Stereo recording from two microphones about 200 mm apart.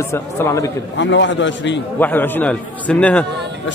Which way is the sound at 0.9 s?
65° left (ahead or behind).